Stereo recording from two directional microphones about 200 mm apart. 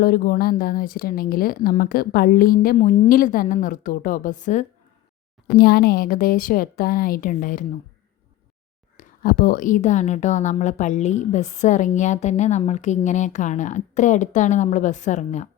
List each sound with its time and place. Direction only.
0.0 s speech: 50° left (ahead or behind)
5.5 s speech: 50° left (ahead or behind)
9.0 s a woman's voice: 45° left (ahead or behind)